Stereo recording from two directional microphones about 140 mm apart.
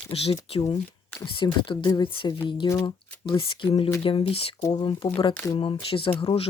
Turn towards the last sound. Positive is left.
turn(degrees=40)  # may be behind; listen again after turning